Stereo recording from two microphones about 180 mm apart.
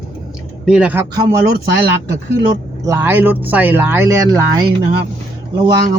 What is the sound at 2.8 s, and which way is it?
Speech, 15° right (ahead or behind).